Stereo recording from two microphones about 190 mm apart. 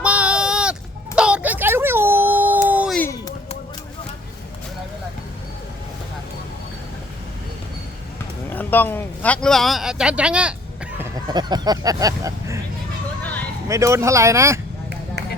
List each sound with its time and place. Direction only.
0.0 s a sound: 5° right (ahead or behind)
2.9 s music: 15° left (ahead or behind)
8.4 s a man's voice: 10° left (ahead or behind); by 10.5 s 5° right (ahead or behind)
11.3 s speech: 20° right (ahead or behind)
13.7 s speech: 15° right (ahead or behind)